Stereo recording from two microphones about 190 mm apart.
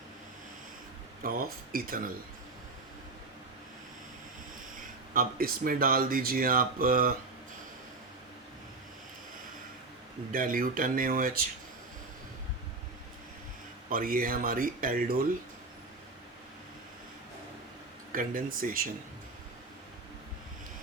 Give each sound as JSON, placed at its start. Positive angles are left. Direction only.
{"t": 1.2, "sound": "speech", "side_deg": -50}
{"t": 5.1, "sound": "speech", "side_deg": -50}
{"t": 10.3, "sound": "speech", "side_deg": -45}
{"t": 13.9, "sound": "speech", "side_deg": -50}
{"t": 18.1, "sound": "speech", "side_deg": -45}